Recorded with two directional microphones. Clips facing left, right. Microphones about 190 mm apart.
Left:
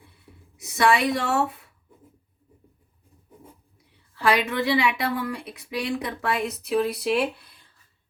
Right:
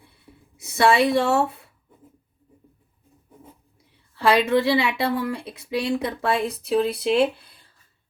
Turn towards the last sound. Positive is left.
turn(degrees=-25)  # may be behind; listen again after turning